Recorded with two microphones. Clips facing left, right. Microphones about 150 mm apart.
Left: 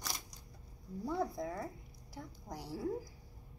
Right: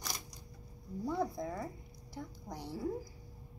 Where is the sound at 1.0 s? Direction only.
5° left (ahead or behind).